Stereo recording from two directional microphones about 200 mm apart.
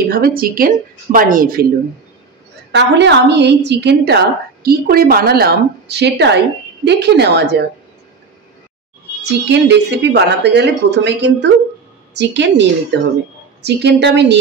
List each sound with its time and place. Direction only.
0.1 s a woman's voice: 50° right (ahead or behind)
2.7 s a woman's voice: 60° right (ahead or behind)
9.2 s a woman's voice: 60° right (ahead or behind)